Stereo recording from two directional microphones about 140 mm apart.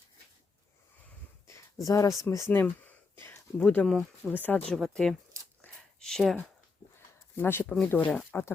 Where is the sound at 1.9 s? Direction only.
25° left (ahead or behind).